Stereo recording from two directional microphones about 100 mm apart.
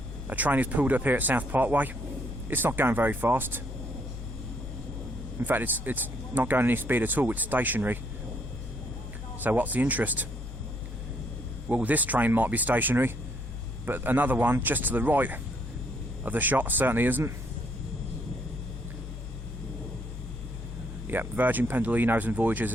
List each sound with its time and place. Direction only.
0.3 s speech: 15° right (ahead or behind)
5.4 s speech: 20° right (ahead or behind)
9.4 s speech: 20° right (ahead or behind)
11.7 s speech: 15° right (ahead or behind)
21.1 s speech: 20° right (ahead or behind)